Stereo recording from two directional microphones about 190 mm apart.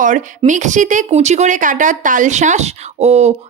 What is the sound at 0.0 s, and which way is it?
Speech, 40° right (ahead or behind).